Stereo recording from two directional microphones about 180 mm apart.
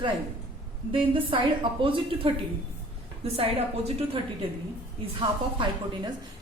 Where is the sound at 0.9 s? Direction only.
30° right (ahead or behind).